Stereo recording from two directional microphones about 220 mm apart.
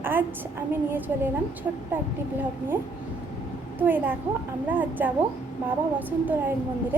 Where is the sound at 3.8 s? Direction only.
10° right (ahead or behind).